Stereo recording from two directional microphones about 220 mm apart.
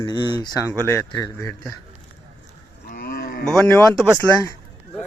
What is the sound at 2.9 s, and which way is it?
Cattle, 40° left (ahead or behind).